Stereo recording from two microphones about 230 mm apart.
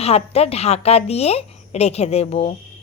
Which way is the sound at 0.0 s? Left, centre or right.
Left.